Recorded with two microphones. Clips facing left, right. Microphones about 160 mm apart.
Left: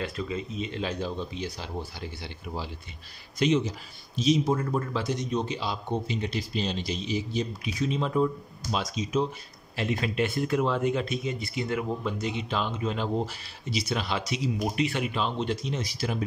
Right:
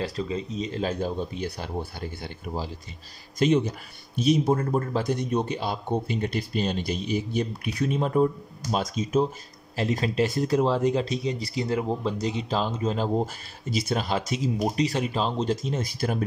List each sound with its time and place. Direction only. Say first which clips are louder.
0.0 s speech: right 3 dB; 35° right (ahead or behind); by 9.2 s 50° right (ahead or behind)
9.8 s speech: right 3 dB; 40° right (ahead or behind)